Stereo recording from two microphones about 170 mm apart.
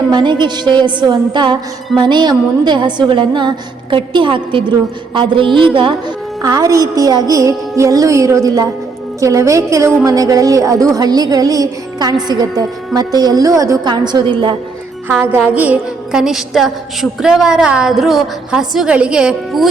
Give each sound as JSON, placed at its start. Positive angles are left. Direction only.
{"t": 0.1, "sound": "a woman's voice", "side_deg": -25}
{"t": 15.4, "sound": "a woman's voice", "side_deg": -10}